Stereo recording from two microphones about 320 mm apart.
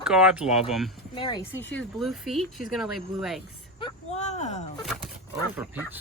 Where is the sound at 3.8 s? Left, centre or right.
Centre.